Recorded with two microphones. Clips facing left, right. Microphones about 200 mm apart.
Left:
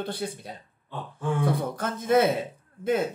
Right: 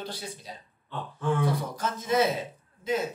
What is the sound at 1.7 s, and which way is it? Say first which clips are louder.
Speech: left 4 dB; 55° left (ahead or behind).